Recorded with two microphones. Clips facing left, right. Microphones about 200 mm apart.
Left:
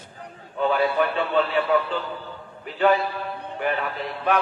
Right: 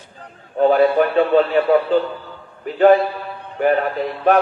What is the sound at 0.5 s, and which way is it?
A man's voice, 40° right (ahead or behind).